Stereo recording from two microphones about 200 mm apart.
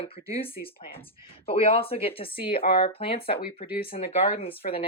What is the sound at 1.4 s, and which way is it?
Speech, 30° left (ahead or behind).